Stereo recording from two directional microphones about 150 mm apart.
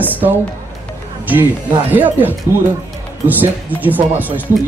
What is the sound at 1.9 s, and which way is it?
Speech, 10° right (ahead or behind).